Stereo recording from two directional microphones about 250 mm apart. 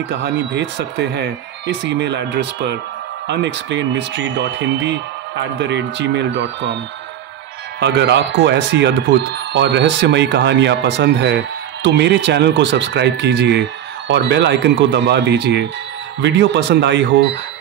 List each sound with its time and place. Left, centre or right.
0.2 s speech: right
7.8 s speech: right